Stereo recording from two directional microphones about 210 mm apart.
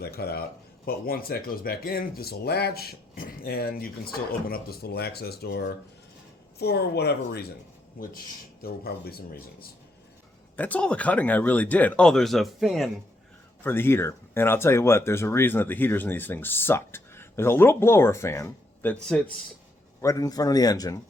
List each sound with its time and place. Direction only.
0.0 s speech: 50° left (ahead or behind)
8.6 s speech: 45° left (ahead or behind)
10.6 s speech: 5° left (ahead or behind)
13.7 s speech: 10° left (ahead or behind)
20.0 s speech: 15° left (ahead or behind)